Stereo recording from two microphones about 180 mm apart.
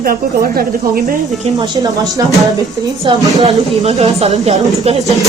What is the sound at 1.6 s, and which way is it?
A woman's voice, 20° right (ahead or behind).